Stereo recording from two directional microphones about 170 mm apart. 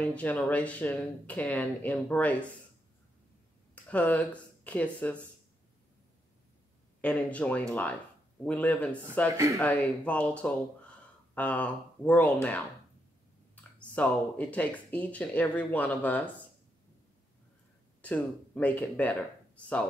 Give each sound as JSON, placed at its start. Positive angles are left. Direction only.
{"t": 0.0, "sound": "speech", "side_deg": 10}
{"t": 3.7, "sound": "speech", "side_deg": 10}
{"t": 7.0, "sound": "speech", "side_deg": 5}
{"t": 13.7, "sound": "speech", "side_deg": 10}
{"t": 18.0, "sound": "speech", "side_deg": 10}